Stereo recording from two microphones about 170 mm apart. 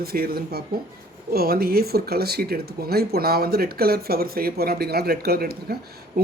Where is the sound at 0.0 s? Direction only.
60° right (ahead or behind).